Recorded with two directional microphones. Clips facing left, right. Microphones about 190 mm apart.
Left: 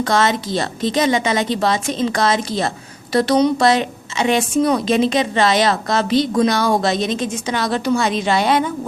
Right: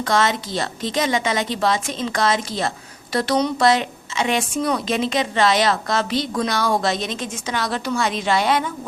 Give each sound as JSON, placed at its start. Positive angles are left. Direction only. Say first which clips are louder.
{"t": 0.0, "sound": "a woman's voice", "louder": "left 3 dB", "side_deg": 35}